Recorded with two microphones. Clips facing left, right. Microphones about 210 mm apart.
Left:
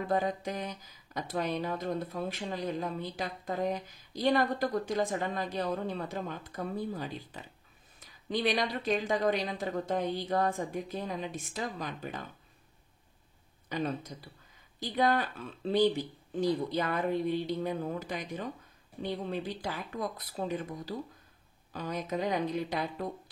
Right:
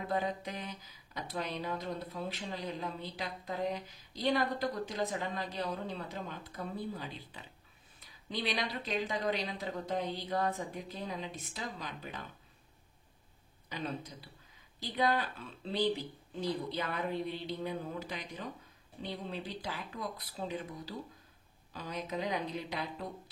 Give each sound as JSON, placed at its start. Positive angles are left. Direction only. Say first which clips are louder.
{"t": 0.1, "sound": "speech", "louder": "left 4 dB", "side_deg": 45}
{"t": 13.7, "sound": "speech", "louder": "left 6 dB", "side_deg": 50}
{"t": 16.3, "sound": "speech", "louder": "left 6 dB", "side_deg": 45}